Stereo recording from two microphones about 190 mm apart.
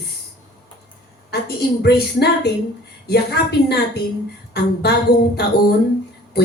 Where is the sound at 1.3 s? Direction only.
60° left (ahead or behind).